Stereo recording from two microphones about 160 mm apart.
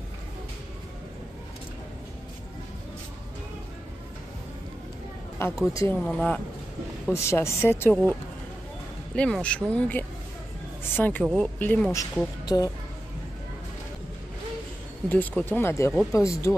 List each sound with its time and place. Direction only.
5.7 s speech: 20° left (ahead or behind)
5.9 s speech: 5° left (ahead or behind)
7.2 s speech: 15° left (ahead or behind)
10.8 s a sound: 10° left (ahead or behind)
11.5 s speech: 10° left (ahead or behind)
11.9 s speech: 20° left (ahead or behind)
15.0 s speech: 10° left (ahead or behind)